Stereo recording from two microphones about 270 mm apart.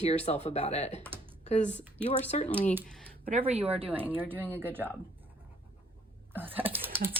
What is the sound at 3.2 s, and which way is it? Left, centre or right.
Speech, right.